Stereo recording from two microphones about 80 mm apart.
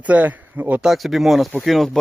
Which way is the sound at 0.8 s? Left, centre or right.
Centre.